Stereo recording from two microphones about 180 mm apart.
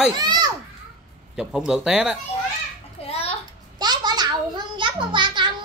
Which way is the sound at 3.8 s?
25° right (ahead or behind).